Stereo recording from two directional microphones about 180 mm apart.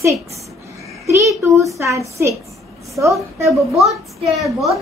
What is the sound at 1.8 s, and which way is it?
A child's voice, 15° right (ahead or behind).